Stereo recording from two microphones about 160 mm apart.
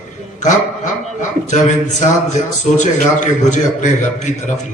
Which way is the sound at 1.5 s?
50° left (ahead or behind).